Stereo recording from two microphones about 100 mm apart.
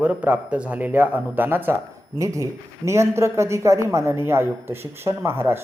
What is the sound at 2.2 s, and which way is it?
A man's voice, 35° right (ahead or behind).